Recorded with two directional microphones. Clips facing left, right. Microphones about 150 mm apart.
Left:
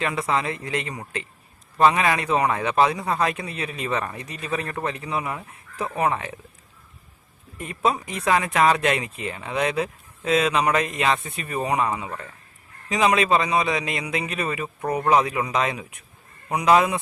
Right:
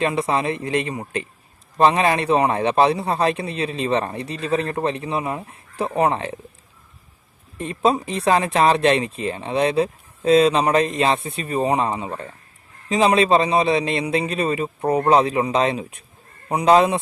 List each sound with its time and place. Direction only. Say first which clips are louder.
0.0 s a man's voice: right 4 dB; 25° right (ahead or behind)
7.5 s a man's voice: right 4 dB; 30° right (ahead or behind)